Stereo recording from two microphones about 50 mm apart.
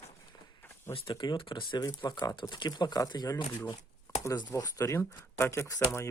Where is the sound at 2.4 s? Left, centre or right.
Left.